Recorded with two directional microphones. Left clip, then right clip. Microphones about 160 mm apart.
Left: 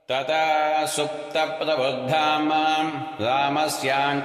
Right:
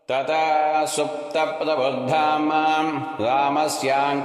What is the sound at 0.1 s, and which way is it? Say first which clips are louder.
Mantra: right 1 dB; 45° right (ahead or behind).